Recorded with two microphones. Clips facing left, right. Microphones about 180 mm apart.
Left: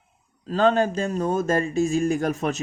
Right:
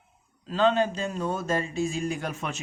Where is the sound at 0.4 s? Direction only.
45° left (ahead or behind).